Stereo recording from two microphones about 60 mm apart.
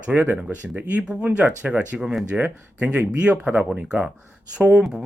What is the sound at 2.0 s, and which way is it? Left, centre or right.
Speech, centre.